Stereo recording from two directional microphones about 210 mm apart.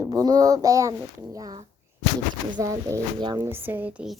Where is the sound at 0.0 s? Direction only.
15° right (ahead or behind).